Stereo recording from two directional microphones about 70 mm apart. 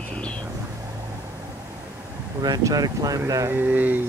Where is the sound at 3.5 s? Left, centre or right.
Right.